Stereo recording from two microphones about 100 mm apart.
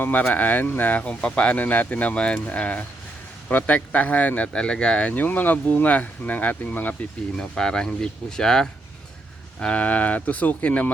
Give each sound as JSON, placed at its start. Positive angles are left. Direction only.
{"t": 0.0, "sound": "speech", "side_deg": 15}
{"t": 7.3, "sound": "speech", "side_deg": 5}